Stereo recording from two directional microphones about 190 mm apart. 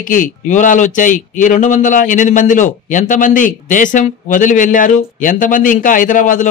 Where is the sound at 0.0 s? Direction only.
45° left (ahead or behind).